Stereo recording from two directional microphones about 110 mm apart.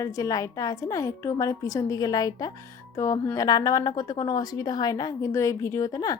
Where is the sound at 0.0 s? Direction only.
30° left (ahead or behind).